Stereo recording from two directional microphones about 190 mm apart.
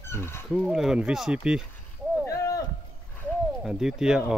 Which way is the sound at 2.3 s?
15° left (ahead or behind).